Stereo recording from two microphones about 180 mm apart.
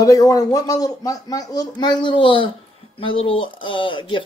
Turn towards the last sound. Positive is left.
turn(degrees=25)  # may be behind; listen again after turning